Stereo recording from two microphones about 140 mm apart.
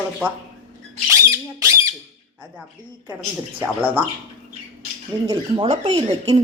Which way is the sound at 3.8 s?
10° right (ahead or behind).